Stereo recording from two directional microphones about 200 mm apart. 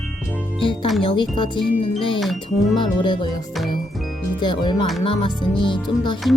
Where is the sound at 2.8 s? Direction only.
25° left (ahead or behind).